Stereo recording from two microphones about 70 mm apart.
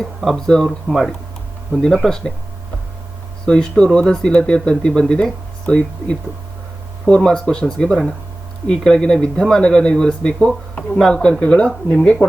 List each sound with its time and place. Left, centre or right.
0.2 s speech: centre
3.4 s speech: centre